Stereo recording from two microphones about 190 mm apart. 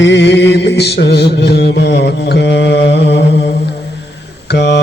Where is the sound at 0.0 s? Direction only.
70° left (ahead or behind).